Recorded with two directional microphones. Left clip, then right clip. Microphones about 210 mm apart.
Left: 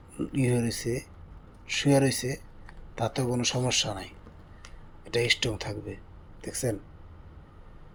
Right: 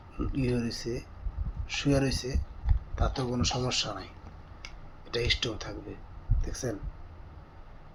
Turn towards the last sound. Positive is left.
turn(degrees=35)  # may be behind; listen again after turning